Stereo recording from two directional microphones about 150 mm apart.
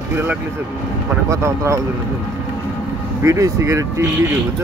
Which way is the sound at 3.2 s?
20° right (ahead or behind).